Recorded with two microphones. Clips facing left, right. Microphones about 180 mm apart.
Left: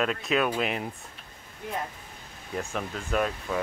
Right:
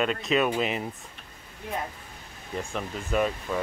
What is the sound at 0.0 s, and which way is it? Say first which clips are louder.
Speech: right 1 dB; centre (ahead or behind).